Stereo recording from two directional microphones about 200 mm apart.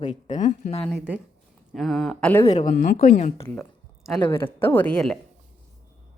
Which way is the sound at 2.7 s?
50° left (ahead or behind).